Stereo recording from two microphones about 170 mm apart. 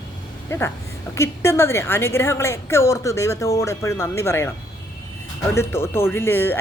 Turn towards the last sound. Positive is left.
turn(degrees=15)  # may be behind; listen again after turning